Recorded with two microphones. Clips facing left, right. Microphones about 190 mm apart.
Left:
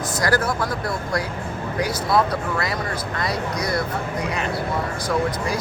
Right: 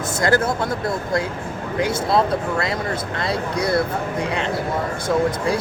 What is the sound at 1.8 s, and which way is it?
Speech, 25° right (ahead or behind).